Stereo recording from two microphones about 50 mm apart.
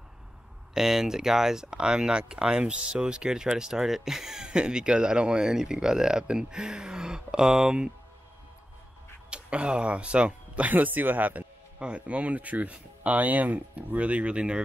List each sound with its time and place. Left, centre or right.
0.7 s speech: centre
9.3 s speech: right
11.8 s speech: right